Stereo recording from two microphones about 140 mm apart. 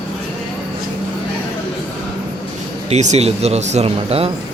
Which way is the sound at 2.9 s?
55° right (ahead or behind).